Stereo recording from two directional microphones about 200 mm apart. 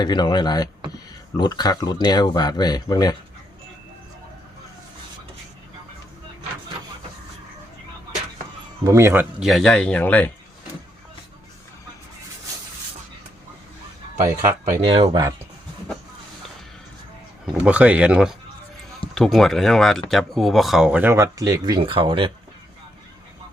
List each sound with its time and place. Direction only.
0.0 s speech: 20° left (ahead or behind)
8.8 s speech: 15° right (ahead or behind)
9.4 s speech: centre (ahead or behind)
14.6 s speech: 30° right (ahead or behind)
17.4 s speech: centre (ahead or behind); by 22.3 s 25° right (ahead or behind)